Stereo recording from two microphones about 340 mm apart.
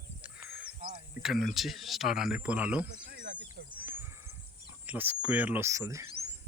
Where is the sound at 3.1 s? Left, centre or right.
Right.